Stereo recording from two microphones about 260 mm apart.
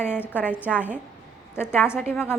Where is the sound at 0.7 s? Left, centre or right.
Centre.